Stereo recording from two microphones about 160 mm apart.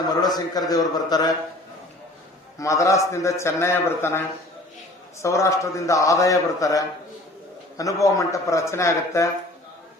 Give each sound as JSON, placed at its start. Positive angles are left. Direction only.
{"t": 0.2, "sound": "a man's voice", "side_deg": 25}
{"t": 2.6, "sound": "a man's voice", "side_deg": 20}